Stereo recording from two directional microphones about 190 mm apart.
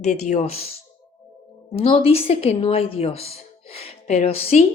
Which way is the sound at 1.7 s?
30° left (ahead or behind).